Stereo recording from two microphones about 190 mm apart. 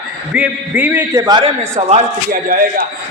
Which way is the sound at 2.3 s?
50° right (ahead or behind).